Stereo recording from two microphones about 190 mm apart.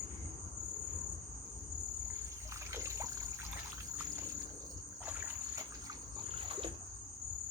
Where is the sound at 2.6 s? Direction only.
15° right (ahead or behind).